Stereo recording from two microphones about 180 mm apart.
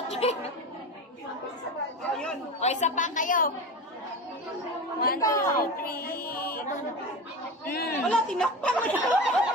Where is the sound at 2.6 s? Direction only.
40° left (ahead or behind).